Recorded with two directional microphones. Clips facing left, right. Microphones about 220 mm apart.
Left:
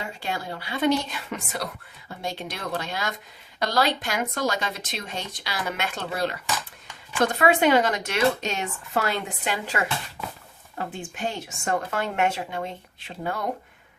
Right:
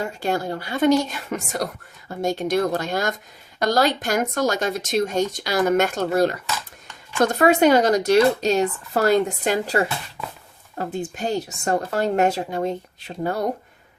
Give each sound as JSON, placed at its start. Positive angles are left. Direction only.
{"t": 0.0, "sound": "speech", "side_deg": -45}